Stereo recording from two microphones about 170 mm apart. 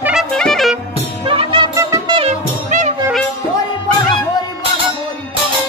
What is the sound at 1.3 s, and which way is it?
Music, 30° right (ahead or behind).